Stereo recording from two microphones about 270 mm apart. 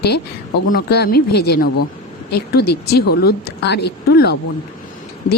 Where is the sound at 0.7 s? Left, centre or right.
Left.